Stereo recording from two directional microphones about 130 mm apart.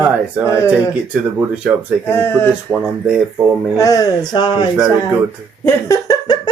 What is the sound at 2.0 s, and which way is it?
Speech, 15° left (ahead or behind).